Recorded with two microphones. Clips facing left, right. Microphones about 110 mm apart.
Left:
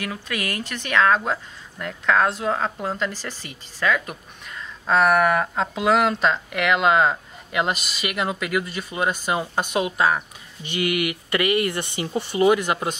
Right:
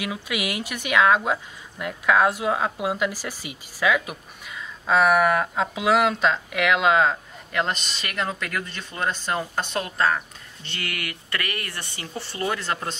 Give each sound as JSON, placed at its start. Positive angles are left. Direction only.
{"t": 0.0, "sound": "speech", "side_deg": -10}